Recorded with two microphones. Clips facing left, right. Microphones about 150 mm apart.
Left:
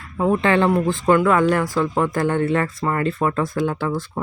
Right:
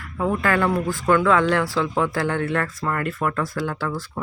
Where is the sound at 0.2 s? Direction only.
25° left (ahead or behind).